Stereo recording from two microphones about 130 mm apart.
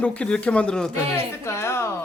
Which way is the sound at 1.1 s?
20° left (ahead or behind).